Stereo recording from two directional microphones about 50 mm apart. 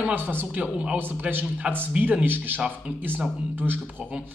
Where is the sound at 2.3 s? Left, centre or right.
Right.